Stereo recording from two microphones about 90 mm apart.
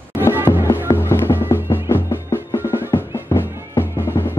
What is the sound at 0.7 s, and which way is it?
Music, 25° left (ahead or behind).